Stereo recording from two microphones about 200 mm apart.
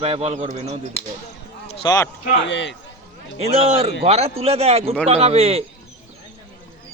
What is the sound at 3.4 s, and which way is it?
A child's voice, 30° right (ahead or behind).